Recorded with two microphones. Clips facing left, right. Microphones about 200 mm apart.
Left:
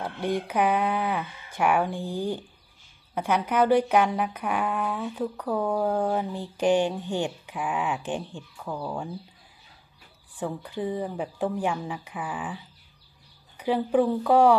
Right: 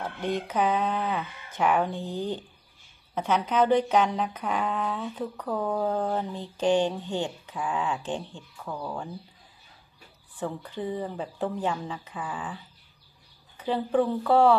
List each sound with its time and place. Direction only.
0.0 s speech: 10° left (ahead or behind)
10.4 s speech: 15° left (ahead or behind)